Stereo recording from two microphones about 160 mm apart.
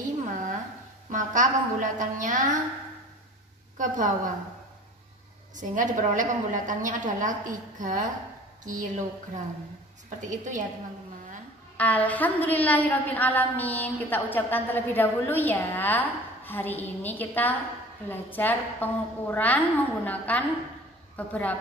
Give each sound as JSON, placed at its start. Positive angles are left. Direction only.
{"t": 0.0, "sound": "a sound", "side_deg": -50}
{"t": 1.1, "sound": "a woman's voice", "side_deg": -55}
{"t": 3.7, "sound": "a woman's voice", "side_deg": -55}
{"t": 5.6, "sound": "a woman's voice", "side_deg": -55}
{"t": 10.0, "sound": "a woman's voice", "side_deg": -50}
{"t": 11.7, "sound": "a woman's voice", "side_deg": 10}